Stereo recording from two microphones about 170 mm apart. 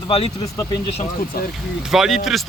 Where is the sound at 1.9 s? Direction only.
Centre (ahead or behind).